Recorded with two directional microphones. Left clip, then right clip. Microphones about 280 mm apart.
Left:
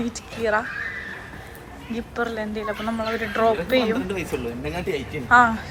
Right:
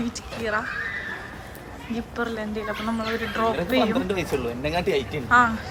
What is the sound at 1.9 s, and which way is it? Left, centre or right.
Speech, centre.